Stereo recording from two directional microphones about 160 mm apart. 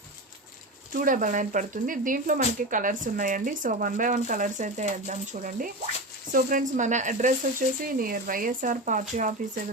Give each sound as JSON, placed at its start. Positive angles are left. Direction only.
{"t": 0.9, "sound": "speech", "side_deg": -60}
{"t": 7.9, "sound": "speech", "side_deg": -65}